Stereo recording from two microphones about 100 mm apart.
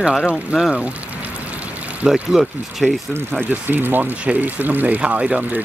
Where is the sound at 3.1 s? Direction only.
20° right (ahead or behind).